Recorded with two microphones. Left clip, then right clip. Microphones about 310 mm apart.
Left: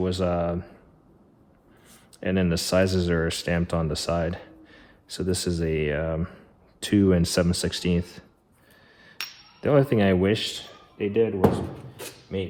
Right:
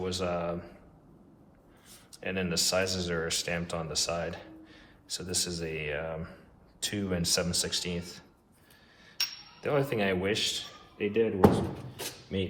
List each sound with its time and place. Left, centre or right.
0.0 s speech: left
2.2 s speech: left
9.6 s a man's voice: left
12.3 s speech: left